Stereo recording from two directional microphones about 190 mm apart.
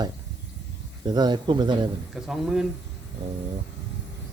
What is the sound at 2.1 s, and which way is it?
Speech, 5° right (ahead or behind).